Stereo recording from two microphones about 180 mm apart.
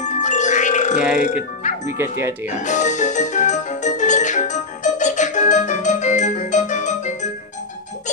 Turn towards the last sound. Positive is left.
turn(degrees=40)  # may be behind; listen again after turning